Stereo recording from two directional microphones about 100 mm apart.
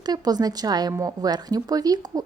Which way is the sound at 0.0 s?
40° right (ahead or behind).